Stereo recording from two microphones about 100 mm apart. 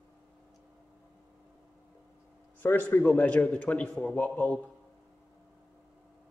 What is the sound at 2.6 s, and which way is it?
A man's voice, 20° left (ahead or behind).